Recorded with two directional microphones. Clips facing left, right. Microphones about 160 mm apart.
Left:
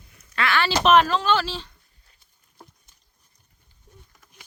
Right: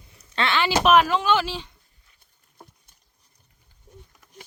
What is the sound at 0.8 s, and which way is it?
Speech, 5° right (ahead or behind).